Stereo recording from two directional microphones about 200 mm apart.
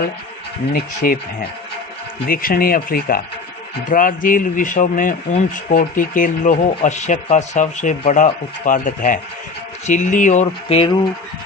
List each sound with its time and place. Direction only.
0.7 s speech: 45° left (ahead or behind); by 10.9 s 30° left (ahead or behind)